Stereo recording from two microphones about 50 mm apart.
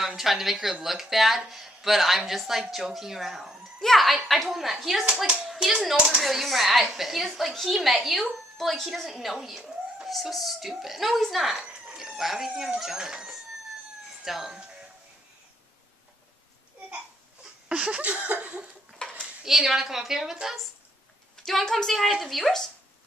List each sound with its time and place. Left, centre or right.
0.0 s a woman's voice: centre
5.0 s a woman's voice: centre
14.2 s speech: centre
17.4 s a sound: centre
18.9 s a sound: centre
19.4 s speech: centre
21.4 s a woman's voice: centre